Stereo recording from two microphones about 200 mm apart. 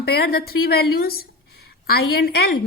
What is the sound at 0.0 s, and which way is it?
A woman's voice, 50° left (ahead or behind).